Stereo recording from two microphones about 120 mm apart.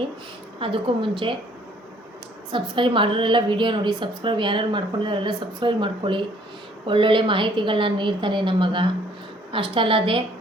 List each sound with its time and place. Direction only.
0.6 s a woman's voice: 45° right (ahead or behind)
2.5 s a woman's voice: 45° right (ahead or behind)